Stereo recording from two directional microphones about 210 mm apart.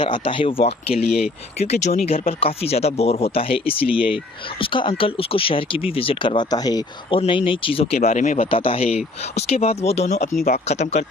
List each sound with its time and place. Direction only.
0.0 s speech: 25° left (ahead or behind)